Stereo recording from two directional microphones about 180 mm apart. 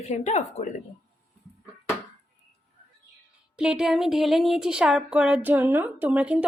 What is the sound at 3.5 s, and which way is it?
Speech, 5° right (ahead or behind).